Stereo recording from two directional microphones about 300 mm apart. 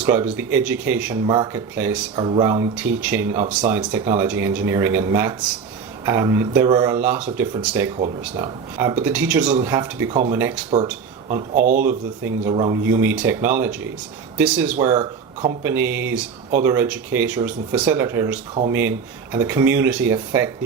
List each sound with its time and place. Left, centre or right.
0.0 s speech: centre
10.8 s a sound: centre
11.5 s speech: right
12.5 s speech: centre